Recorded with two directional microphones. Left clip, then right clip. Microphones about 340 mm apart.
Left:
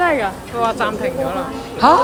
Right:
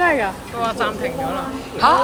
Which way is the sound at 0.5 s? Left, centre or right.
Left.